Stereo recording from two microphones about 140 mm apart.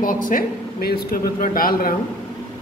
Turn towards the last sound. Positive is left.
turn(degrees=90)